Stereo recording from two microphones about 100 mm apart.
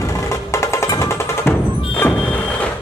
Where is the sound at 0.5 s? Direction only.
30° left (ahead or behind).